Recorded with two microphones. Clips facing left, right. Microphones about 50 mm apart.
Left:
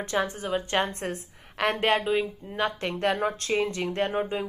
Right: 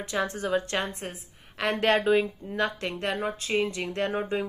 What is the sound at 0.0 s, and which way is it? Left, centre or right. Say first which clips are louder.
Speech: left 2 dB; left.